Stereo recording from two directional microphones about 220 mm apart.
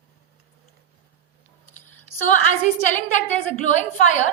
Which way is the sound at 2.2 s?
35° left (ahead or behind).